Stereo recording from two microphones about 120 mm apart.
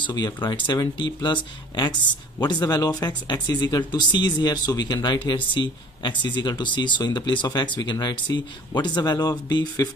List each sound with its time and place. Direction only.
0.0 s speech: 35° left (ahead or behind)